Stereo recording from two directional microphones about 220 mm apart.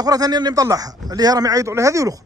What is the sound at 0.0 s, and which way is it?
Speech, 15° right (ahead or behind).